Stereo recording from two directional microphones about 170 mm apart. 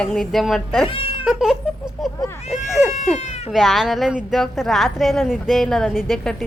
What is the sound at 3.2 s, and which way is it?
Cat, 40° left (ahead or behind).